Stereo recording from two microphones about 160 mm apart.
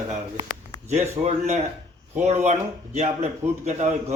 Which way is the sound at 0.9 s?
45° right (ahead or behind).